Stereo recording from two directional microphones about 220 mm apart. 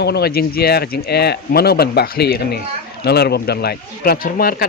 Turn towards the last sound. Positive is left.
turn(degrees=40)  # may be behind; listen again after turning